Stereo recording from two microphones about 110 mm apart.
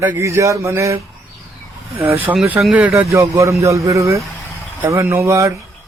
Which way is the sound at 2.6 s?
Centre (ahead or behind).